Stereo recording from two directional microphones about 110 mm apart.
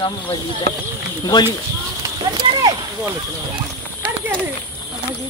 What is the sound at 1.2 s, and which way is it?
Speech, 35° left (ahead or behind).